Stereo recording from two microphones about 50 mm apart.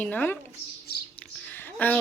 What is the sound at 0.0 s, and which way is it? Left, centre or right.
Speech, left.